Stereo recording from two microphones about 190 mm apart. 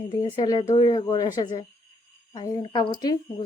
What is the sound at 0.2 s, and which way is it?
A woman's voice, 20° left (ahead or behind).